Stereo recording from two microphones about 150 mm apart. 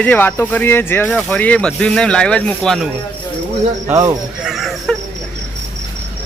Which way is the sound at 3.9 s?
20° right (ahead or behind).